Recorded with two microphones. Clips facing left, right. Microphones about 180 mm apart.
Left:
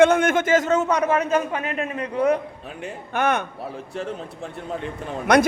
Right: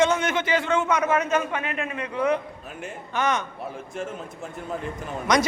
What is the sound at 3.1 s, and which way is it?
Speech, 55° left (ahead or behind).